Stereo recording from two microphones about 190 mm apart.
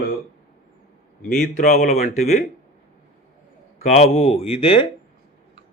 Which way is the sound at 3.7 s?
35° left (ahead or behind).